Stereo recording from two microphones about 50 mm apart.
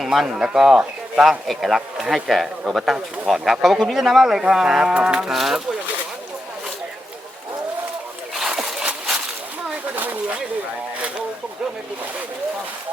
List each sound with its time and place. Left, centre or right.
0.0 s speech: centre
5.3 s speech: centre
8.4 s splash: centre
9.9 s a sound: right